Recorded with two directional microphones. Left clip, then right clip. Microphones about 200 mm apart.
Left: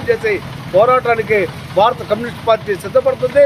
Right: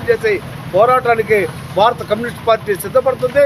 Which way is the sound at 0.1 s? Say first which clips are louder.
Right 1 dB; centre (ahead or behind).